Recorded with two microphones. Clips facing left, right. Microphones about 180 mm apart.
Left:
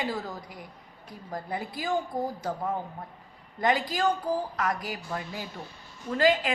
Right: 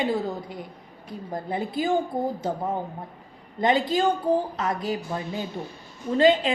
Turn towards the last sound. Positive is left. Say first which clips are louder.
# right 5 dB
turn(degrees=-25)  # may be behind; listen again after turning